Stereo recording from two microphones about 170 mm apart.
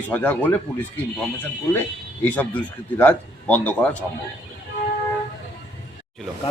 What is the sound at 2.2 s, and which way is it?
Speech, 10° left (ahead or behind).